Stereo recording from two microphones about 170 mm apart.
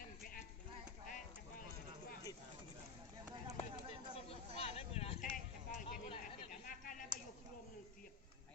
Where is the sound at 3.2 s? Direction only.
25° right (ahead or behind).